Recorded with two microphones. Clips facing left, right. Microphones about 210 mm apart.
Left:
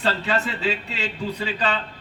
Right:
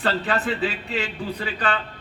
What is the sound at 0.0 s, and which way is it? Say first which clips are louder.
A man's voice: even; 55° right (ahead or behind).